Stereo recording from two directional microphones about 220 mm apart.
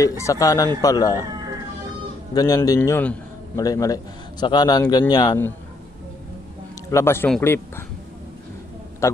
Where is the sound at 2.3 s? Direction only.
15° left (ahead or behind).